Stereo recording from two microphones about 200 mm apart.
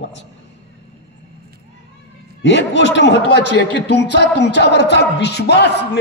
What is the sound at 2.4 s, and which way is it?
A man's voice, 65° left (ahead or behind).